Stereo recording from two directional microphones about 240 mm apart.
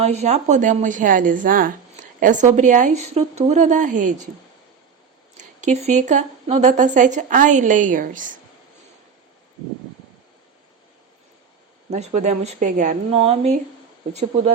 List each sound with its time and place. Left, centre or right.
0.0 s a woman's voice: right
5.4 s a woman's voice: right
11.9 s speech: right